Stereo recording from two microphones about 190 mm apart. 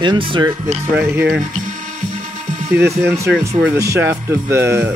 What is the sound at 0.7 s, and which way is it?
Speech, 5° right (ahead or behind).